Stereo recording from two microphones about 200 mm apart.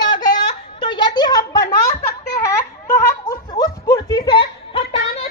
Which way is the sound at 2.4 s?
15° left (ahead or behind).